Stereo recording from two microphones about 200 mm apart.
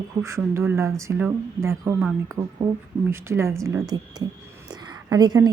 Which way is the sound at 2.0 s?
Centre (ahead or behind).